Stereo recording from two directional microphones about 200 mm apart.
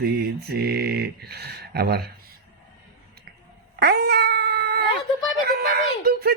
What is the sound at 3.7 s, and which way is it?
Cat, 55° right (ahead or behind).